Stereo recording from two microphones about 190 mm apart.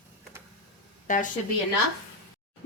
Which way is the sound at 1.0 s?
40° left (ahead or behind).